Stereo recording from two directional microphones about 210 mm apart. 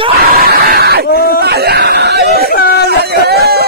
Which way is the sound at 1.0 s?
45° left (ahead or behind).